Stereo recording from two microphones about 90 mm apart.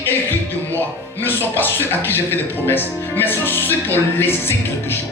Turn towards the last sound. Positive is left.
turn(degrees=25)  # may be behind; listen again after turning